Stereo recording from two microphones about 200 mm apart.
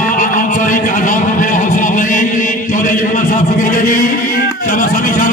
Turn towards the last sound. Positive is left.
turn(degrees=40)  # may be behind; listen again after turning